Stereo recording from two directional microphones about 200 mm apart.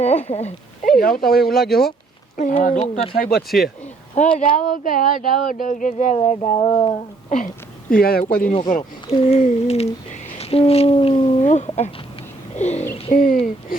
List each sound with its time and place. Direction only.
0.0 s speech: 35° left (ahead or behind)
0.9 s speech: 45° left (ahead or behind)
4.1 s speech: 35° left (ahead or behind)
4.5 s speech: 45° left (ahead or behind)
7.9 s speech: 50° left (ahead or behind)
12.5 s a sound: 35° left (ahead or behind)
13.1 s speech: 35° left (ahead or behind)